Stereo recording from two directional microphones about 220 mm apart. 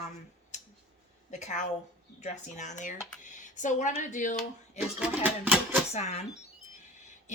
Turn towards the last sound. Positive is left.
turn(degrees=30)  # may be behind; listen again after turning